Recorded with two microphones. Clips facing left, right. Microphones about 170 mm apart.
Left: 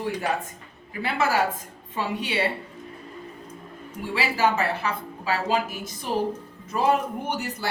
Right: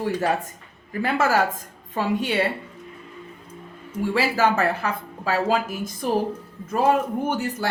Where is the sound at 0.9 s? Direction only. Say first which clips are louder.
Right 3 dB; 45° right (ahead or behind).